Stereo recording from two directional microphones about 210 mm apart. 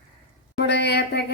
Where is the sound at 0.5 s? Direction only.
55° left (ahead or behind).